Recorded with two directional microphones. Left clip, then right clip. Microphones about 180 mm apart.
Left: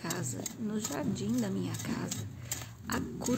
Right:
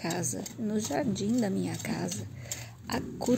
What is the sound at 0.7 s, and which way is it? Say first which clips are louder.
Speech: right 6 dB; 20° right (ahead or behind).